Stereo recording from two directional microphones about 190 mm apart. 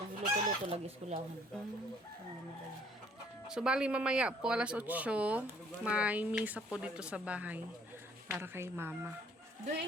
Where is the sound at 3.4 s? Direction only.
5° right (ahead or behind).